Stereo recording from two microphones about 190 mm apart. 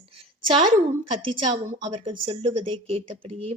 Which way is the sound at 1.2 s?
25° right (ahead or behind).